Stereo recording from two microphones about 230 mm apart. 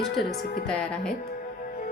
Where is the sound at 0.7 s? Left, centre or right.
Centre.